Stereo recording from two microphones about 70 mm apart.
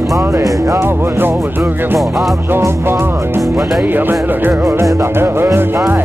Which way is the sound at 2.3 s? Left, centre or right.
Right.